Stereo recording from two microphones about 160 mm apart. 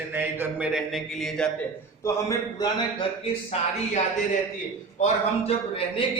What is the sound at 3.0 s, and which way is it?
A man's voice, 40° left (ahead or behind).